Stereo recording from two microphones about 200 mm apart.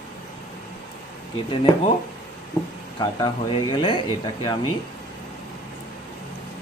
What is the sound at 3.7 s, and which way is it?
Speech, 25° left (ahead or behind).